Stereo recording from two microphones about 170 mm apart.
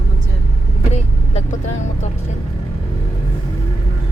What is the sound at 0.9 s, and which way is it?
Vehicle, 40° left (ahead or behind).